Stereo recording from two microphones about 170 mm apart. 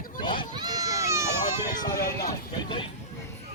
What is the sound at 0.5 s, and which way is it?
Baby cry, 20° right (ahead or behind).